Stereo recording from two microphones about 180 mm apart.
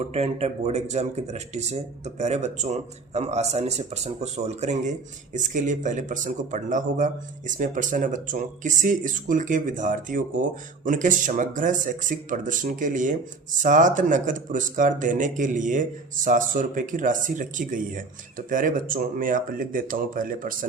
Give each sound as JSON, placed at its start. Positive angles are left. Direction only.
{"t": 0.0, "sound": "speech", "side_deg": -35}